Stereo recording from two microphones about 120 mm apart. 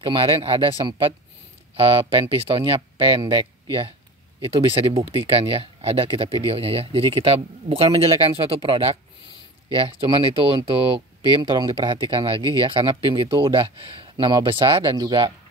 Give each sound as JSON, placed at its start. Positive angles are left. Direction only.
{"t": 0.0, "sound": "speech", "side_deg": -45}
{"t": 15.0, "sound": "speech", "side_deg": -35}